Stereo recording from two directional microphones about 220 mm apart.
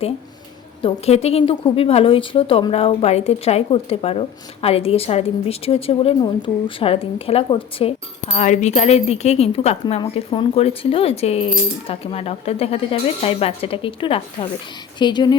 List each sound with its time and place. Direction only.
0.8 s a woman's voice: 25° left (ahead or behind)